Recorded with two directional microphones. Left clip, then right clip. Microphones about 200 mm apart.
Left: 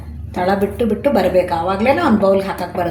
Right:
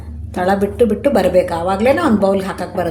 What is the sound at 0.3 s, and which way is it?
A woman's voice, 15° right (ahead or behind).